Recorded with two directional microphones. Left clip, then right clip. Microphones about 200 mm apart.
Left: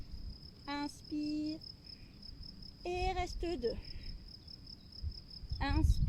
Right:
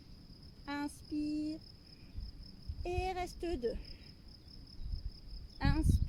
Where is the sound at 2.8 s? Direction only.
15° right (ahead or behind).